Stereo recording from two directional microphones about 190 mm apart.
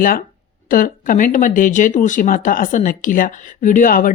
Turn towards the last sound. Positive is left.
turn(degrees=45)  # may be behind; listen again after turning